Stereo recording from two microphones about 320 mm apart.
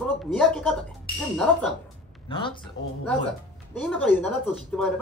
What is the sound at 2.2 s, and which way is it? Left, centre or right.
Speech, centre.